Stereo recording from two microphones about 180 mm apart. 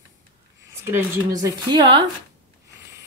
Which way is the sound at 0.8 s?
15° right (ahead or behind).